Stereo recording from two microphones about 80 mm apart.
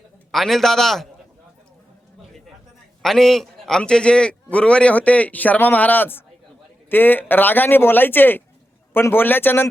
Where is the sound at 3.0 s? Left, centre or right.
Centre.